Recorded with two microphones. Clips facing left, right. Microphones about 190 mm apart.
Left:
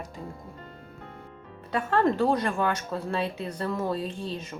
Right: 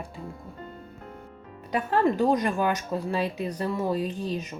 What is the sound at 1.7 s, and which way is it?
Speech, 15° right (ahead or behind).